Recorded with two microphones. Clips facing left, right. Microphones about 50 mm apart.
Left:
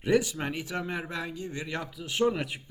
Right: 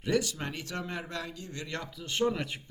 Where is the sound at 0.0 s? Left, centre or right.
Centre.